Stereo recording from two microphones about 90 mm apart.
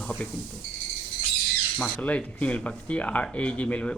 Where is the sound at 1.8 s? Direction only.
15° left (ahead or behind).